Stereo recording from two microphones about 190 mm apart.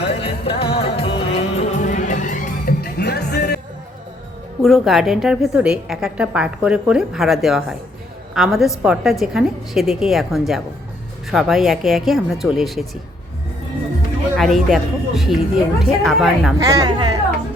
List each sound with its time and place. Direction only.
0.0 s music: 30° left (ahead or behind); by 3.6 s 55° left (ahead or behind)
4.6 s a woman's voice: centre (ahead or behind)
14.3 s a woman's voice: centre (ahead or behind)
16.6 s a woman's voice: 20° right (ahead or behind)